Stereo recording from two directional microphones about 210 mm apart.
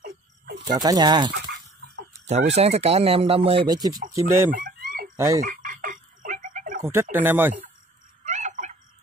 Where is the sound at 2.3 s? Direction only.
30° right (ahead or behind); by 4.5 s 10° right (ahead or behind).